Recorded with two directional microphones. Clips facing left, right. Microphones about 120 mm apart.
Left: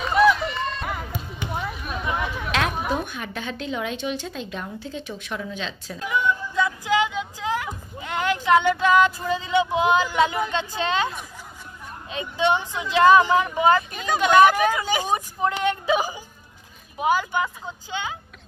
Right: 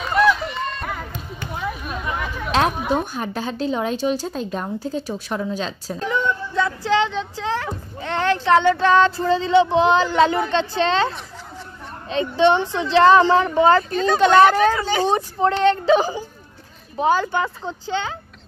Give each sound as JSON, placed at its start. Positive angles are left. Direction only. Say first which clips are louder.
{"t": 0.0, "sound": "run", "louder": "even", "side_deg": 5}
{"t": 2.1, "sound": "chatter", "louder": "even", "side_deg": 5}
{"t": 2.9, "sound": "a woman's voice", "louder": "right 5 dB", "side_deg": -35}
{"t": 5.9, "sound": "a woman's voice", "louder": "right 1 dB", "side_deg": 10}
{"t": 12.8, "sound": "a woman's voice", "louder": "right 2 dB", "side_deg": 10}